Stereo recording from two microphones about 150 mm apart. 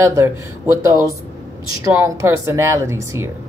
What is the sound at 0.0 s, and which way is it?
Speech, 20° right (ahead or behind).